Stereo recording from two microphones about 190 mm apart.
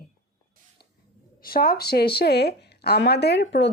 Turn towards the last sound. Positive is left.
turn(degrees=60)  # may be behind; listen again after turning